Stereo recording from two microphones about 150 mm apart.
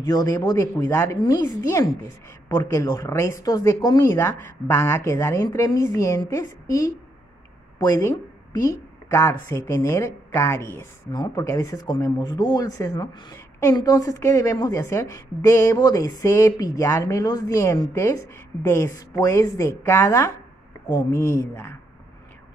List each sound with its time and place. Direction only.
0.0 s speech: 25° left (ahead or behind)